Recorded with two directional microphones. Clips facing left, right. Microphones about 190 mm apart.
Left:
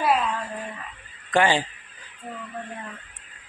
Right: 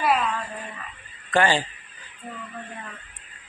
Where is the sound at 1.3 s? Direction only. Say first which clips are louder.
Even; 15° left (ahead or behind).